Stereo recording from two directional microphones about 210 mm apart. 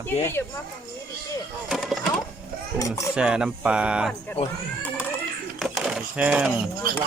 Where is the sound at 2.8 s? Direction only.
15° left (ahead or behind).